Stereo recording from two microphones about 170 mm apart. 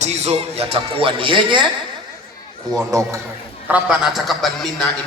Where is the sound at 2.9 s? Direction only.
20° right (ahead or behind).